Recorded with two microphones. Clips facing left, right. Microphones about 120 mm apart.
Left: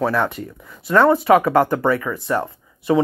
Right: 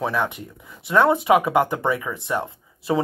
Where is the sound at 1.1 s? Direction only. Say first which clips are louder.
Left 3 dB; 15° right (ahead or behind).